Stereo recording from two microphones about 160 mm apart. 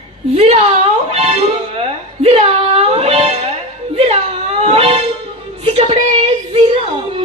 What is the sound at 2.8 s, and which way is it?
Music, 40° right (ahead or behind).